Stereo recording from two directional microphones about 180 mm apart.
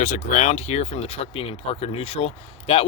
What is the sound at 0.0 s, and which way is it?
Speech, 45° left (ahead or behind).